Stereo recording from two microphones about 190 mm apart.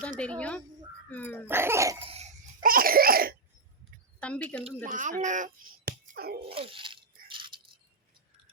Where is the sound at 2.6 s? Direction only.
50° right (ahead or behind).